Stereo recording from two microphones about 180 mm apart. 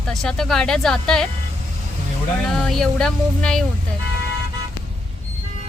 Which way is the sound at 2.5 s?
5° left (ahead or behind).